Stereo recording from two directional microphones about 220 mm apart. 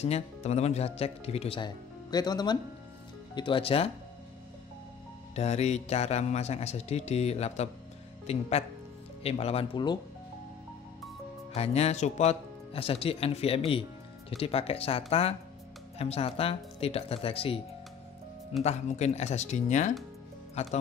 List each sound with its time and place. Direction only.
0.0 s speech: 30° left (ahead or behind)
5.3 s speech: 30° left (ahead or behind)
11.5 s speech: 30° left (ahead or behind)
18.6 s speech: 30° left (ahead or behind)